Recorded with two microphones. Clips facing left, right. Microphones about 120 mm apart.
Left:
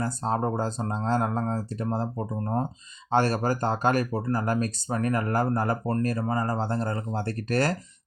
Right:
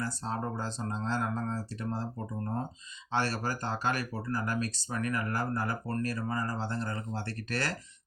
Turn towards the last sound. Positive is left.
turn(degrees=45)  # may be behind; listen again after turning